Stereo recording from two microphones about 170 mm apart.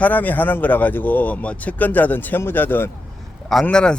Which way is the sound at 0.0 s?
10° left (ahead or behind).